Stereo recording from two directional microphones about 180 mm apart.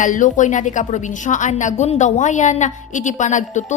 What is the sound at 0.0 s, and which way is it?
A woman's voice, 45° left (ahead or behind).